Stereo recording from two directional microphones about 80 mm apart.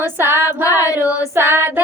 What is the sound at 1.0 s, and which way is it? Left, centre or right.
Child singing, right.